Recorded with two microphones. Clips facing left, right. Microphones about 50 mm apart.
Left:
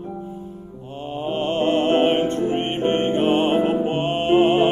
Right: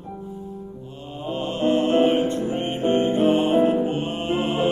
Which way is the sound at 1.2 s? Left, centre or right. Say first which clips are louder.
Left 2 dB; left.